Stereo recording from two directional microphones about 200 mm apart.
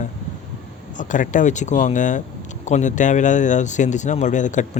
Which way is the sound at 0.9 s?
40° left (ahead or behind).